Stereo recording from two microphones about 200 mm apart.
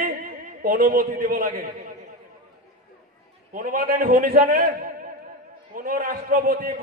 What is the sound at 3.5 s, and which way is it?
A man's voice, 45° right (ahead or behind).